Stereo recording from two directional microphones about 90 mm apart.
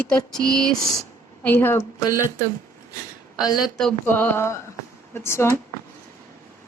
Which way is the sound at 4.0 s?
20° left (ahead or behind).